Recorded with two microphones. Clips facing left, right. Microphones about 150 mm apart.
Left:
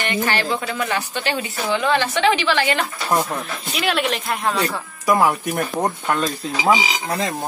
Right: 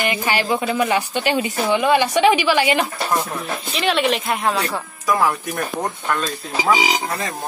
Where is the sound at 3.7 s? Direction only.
Centre (ahead or behind).